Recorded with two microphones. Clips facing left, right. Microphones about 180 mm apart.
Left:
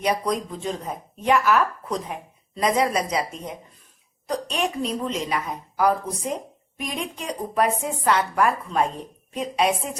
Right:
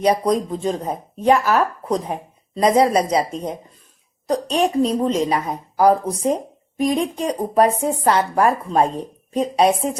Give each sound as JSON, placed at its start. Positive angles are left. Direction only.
{"t": 0.0, "sound": "a woman's voice", "side_deg": -35}